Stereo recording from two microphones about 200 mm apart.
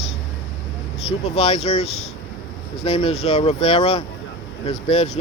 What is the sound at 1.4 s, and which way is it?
Speech, 30° left (ahead or behind).